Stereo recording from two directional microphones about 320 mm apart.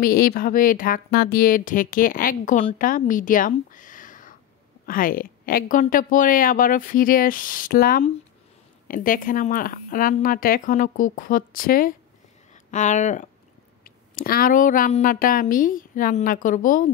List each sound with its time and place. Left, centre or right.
0.0 s speech: left